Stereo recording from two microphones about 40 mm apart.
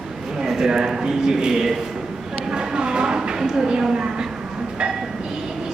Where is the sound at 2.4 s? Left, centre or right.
Right.